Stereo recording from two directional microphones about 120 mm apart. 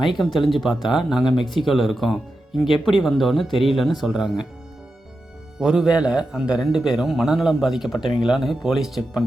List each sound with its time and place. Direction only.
0.0 s a man's voice: centre (ahead or behind)
5.5 s a man's voice: 5° right (ahead or behind)